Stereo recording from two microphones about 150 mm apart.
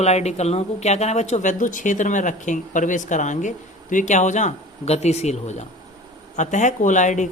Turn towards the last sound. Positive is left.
turn(degrees=55)  # may be behind; listen again after turning